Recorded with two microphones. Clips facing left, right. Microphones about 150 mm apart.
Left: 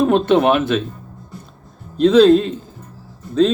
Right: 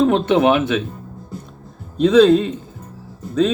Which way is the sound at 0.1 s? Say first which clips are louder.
Left 1 dB; 10° right (ahead or behind).